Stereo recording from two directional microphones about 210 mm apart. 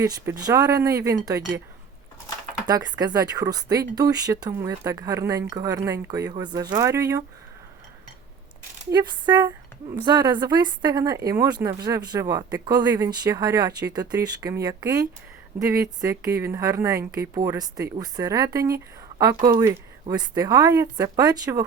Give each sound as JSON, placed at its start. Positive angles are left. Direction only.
{"t": 0.0, "sound": "speech", "side_deg": -15}
{"t": 2.6, "sound": "speech", "side_deg": -20}
{"t": 8.9, "sound": "speech", "side_deg": -20}